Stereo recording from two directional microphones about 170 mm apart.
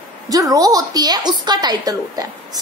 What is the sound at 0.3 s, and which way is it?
A woman's voice, 20° right (ahead or behind).